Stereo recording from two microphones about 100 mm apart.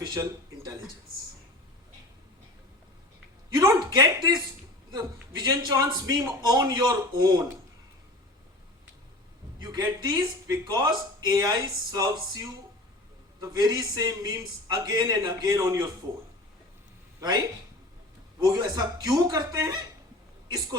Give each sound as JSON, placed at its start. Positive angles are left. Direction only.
{"t": 0.0, "sound": "a sound", "side_deg": -40}
{"t": 3.8, "sound": "a sound", "side_deg": -45}
{"t": 4.9, "sound": "a man's voice", "side_deg": -40}
{"t": 9.6, "sound": "a man's voice", "side_deg": -45}
{"t": 13.6, "sound": "a man's voice", "side_deg": -40}
{"t": 17.2, "sound": "a man's voice", "side_deg": -35}